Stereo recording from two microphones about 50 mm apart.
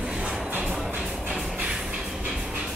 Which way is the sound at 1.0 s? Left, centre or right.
Centre.